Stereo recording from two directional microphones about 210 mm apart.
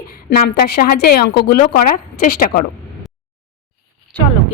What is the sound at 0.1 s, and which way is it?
A woman's voice, 45° left (ahead or behind).